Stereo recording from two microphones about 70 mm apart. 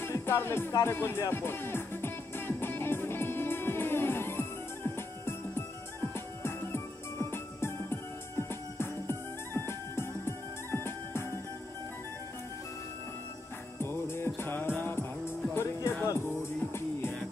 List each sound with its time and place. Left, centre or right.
0.1 s music: left
0.8 s speech: left
1.3 s music: left
13.7 s music: left